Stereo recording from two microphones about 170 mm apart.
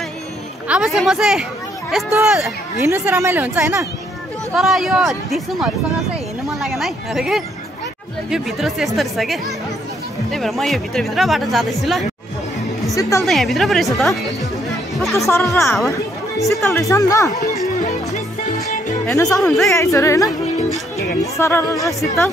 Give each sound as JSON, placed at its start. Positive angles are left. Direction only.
{"t": 0.7, "sound": "speech", "side_deg": -5}
{"t": 2.9, "sound": "speech", "side_deg": -15}
{"t": 4.6, "sound": "speech", "side_deg": 0}
{"t": 13.2, "sound": "speech", "side_deg": 0}
{"t": 15.1, "sound": "speech", "side_deg": 20}
{"t": 16.3, "sound": "speech", "side_deg": 0}
{"t": 16.6, "sound": "speech", "side_deg": 15}
{"t": 19.1, "sound": "speech", "side_deg": 20}
{"t": 19.4, "sound": "speech", "side_deg": 0}
{"t": 19.7, "sound": "speech", "side_deg": 15}